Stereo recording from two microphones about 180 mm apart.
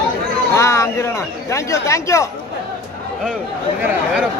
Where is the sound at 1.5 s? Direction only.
15° left (ahead or behind).